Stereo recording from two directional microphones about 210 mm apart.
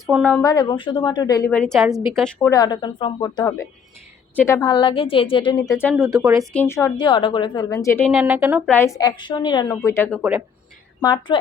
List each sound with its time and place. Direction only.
0.1 s a woman's voice: 5° left (ahead or behind)
0.5 s a woman's voice: 20° left (ahead or behind); by 2.5 s centre (ahead or behind)
2.5 s a woman's voice: 20° left (ahead or behind)
6.1 s speech: 15° right (ahead or behind)
6.5 s a woman's voice: 10° left (ahead or behind)
8.2 s speech: 10° right (ahead or behind)
8.7 s a woman's voice: 15° left (ahead or behind)
10.2 s speech: 5° right (ahead or behind)
11.0 s a woman's voice: 20° left (ahead or behind)